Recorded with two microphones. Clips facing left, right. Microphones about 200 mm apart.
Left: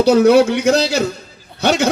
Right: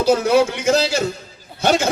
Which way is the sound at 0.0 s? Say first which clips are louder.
Left 5 dB; 65° left (ahead or behind).